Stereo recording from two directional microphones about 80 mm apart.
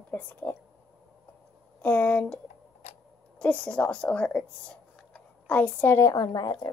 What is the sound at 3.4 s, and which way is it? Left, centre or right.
A woman's voice, centre.